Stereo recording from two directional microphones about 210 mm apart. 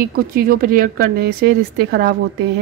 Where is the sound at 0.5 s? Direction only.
45° right (ahead or behind).